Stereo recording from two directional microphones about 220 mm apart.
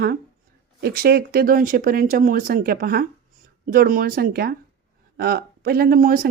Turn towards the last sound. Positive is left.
turn(degrees=-40)  # may be behind; listen again after turning